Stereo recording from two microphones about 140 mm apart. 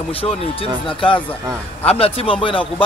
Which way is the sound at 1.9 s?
45° left (ahead or behind).